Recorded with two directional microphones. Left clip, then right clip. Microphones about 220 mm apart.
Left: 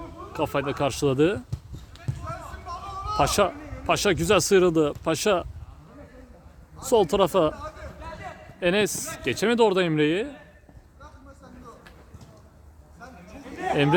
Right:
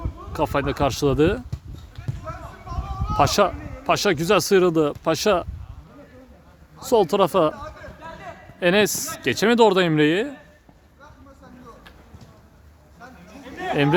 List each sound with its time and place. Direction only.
0.3 s speech: 15° right (ahead or behind)
2.2 s a sound: 35° left (ahead or behind)
3.2 s speech: 15° right (ahead or behind)
6.7 s speech: 10° right (ahead or behind)
8.5 s speech: 25° right (ahead or behind)